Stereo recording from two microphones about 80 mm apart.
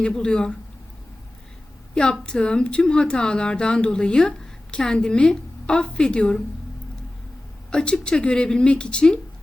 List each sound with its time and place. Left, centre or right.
0.0 s speech: centre
2.2 s speech: centre
7.7 s speech: centre